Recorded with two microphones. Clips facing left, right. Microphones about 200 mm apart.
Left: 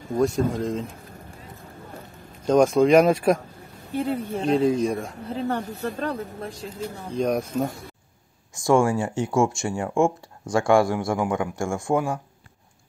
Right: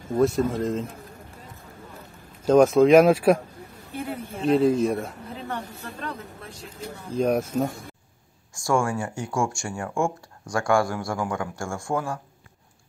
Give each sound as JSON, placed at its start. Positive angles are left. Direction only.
{"t": 0.2, "sound": "speech", "side_deg": 0}
{"t": 2.4, "sound": "speech", "side_deg": -5}
{"t": 4.0, "sound": "speech", "side_deg": 30}
{"t": 4.5, "sound": "speech", "side_deg": 0}
{"t": 5.8, "sound": "speech", "side_deg": 45}
{"t": 7.1, "sound": "speech", "side_deg": -5}
{"t": 8.5, "sound": "speech", "side_deg": 20}